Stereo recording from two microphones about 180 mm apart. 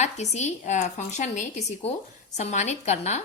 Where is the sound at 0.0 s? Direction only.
40° left (ahead or behind).